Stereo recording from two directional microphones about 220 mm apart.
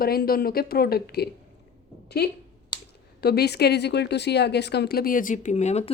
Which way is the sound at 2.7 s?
20° left (ahead or behind).